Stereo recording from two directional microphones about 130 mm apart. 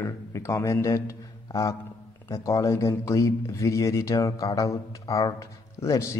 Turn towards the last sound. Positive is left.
turn(degrees=25)  # may be behind; listen again after turning